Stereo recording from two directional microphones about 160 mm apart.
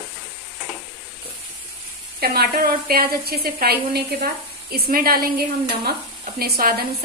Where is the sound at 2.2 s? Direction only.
75° right (ahead or behind).